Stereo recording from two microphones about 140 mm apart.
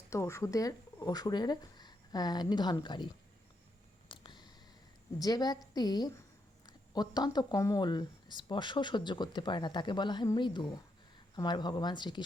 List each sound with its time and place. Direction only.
0.1 s speech: 20° left (ahead or behind)
4.1 s a sound: 35° left (ahead or behind)
5.2 s a woman's voice: 25° left (ahead or behind)